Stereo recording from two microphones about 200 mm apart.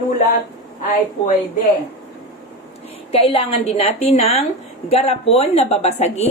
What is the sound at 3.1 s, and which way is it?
A woman's voice, 30° left (ahead or behind).